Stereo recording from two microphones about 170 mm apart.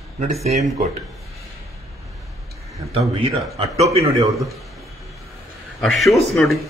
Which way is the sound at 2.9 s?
35° right (ahead or behind).